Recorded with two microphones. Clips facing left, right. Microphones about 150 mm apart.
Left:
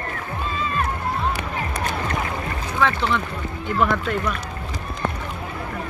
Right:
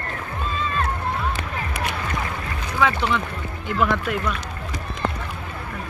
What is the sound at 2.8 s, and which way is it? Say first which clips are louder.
Speech: even; 5° right (ahead or behind).